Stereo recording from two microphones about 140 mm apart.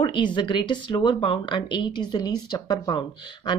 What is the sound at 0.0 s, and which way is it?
Speech, 35° left (ahead or behind).